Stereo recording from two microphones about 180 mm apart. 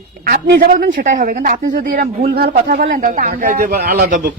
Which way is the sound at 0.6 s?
50° right (ahead or behind).